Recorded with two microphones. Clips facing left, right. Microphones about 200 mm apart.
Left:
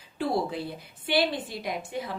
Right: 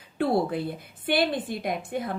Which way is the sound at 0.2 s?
60° right (ahead or behind).